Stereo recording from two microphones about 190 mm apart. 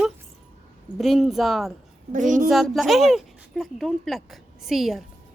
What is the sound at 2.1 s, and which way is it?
Speech, 40° right (ahead or behind).